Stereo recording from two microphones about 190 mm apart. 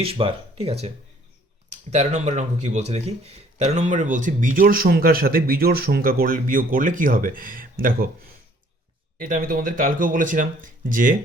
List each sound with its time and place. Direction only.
0.0 s speech: 30° right (ahead or behind); by 11.2 s 45° right (ahead or behind)